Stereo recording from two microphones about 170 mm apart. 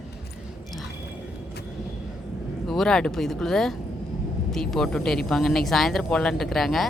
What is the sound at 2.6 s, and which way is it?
Speech, centre (ahead or behind).